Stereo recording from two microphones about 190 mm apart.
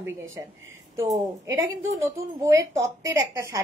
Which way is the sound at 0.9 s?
15° right (ahead or behind).